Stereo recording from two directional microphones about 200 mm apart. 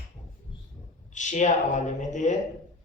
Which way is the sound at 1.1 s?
40° left (ahead or behind).